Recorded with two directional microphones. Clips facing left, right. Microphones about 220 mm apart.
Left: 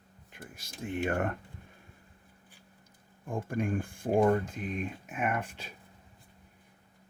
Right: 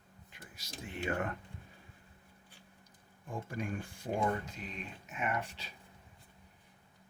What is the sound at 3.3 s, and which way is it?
Speech, 50° left (ahead or behind).